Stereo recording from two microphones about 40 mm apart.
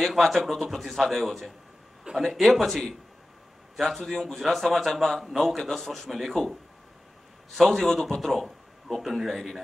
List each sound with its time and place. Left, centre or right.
0.0 s a man's voice: centre
2.1 s a sound: right
2.4 s a man's voice: centre
7.5 s a man's voice: centre